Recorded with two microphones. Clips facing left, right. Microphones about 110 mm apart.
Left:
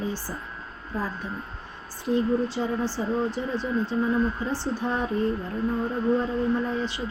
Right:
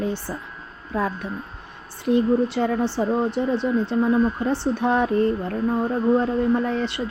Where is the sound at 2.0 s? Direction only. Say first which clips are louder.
Right 5 dB; 65° right (ahead or behind).